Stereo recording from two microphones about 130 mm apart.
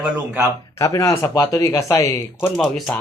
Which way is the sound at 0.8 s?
25° left (ahead or behind).